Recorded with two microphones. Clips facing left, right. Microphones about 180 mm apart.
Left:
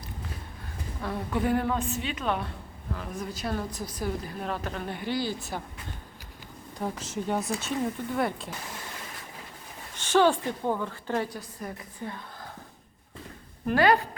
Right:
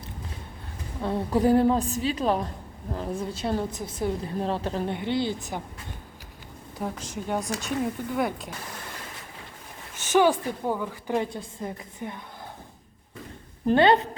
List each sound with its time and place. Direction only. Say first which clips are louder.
1.0 s a woman's voice: right 6 dB; 35° right (ahead or behind); by 5.6 s 15° right (ahead or behind)
6.7 s a woman's voice: even; 5° right (ahead or behind)
10.1 s a woman's voice: right 1 dB; 10° right (ahead or behind)
11.3 s speech: right 3 dB; 25° right (ahead or behind)
13.7 s speech: right 3 dB; 25° right (ahead or behind)